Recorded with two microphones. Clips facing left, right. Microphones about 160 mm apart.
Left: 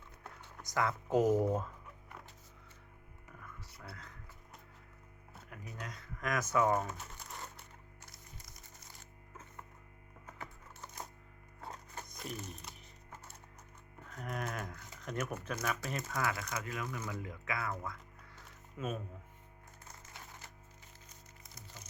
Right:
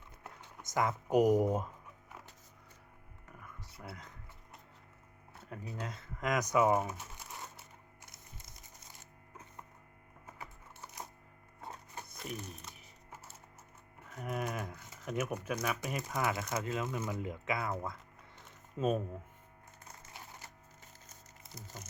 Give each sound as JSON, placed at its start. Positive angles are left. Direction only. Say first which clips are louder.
{"t": 0.6, "sound": "speech", "louder": "right 1 dB", "side_deg": -20}
{"t": 3.8, "sound": "music", "louder": "right 4 dB", "side_deg": -20}
{"t": 5.5, "sound": "speech", "louder": "right 5 dB", "side_deg": -25}
{"t": 11.6, "sound": "music", "louder": "even", "side_deg": -5}
{"t": 14.1, "sound": "speech", "louder": "right 3 dB", "side_deg": -5}